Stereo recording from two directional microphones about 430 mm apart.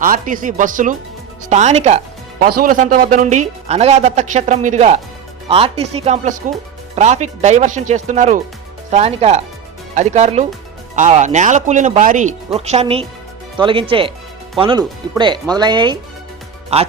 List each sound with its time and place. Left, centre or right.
0.0 s speech: centre